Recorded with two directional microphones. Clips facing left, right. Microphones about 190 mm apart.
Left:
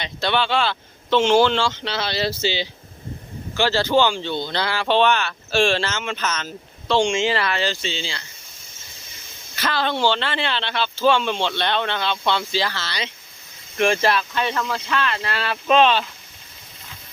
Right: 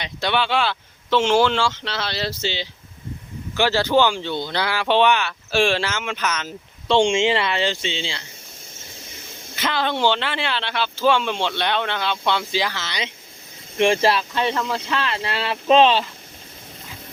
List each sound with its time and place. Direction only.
0.0 s speech: 10° right (ahead or behind); by 2.6 s 5° left (ahead or behind)
3.6 s speech: 15° right (ahead or behind)
6.8 s speech: 25° right (ahead or behind)
9.6 s speech: 20° right (ahead or behind)